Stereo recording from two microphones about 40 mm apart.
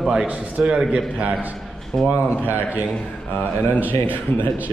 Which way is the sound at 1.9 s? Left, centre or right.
Centre.